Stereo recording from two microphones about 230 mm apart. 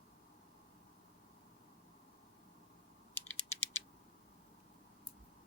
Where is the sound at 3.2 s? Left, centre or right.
Centre.